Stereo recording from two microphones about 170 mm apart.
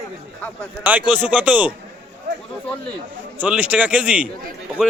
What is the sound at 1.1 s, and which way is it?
Speech, 10° right (ahead or behind).